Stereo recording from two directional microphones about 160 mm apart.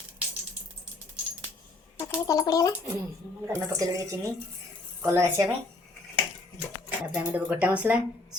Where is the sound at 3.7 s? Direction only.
20° right (ahead or behind).